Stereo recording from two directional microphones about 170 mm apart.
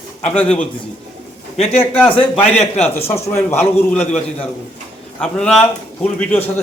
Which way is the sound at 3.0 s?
15° left (ahead or behind).